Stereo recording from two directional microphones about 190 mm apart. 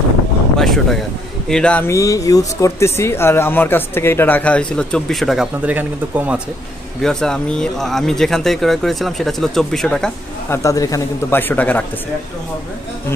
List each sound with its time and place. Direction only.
0.6 s speech: centre (ahead or behind)
7.0 s speech: 5° left (ahead or behind)
10.5 s speech: 15° left (ahead or behind)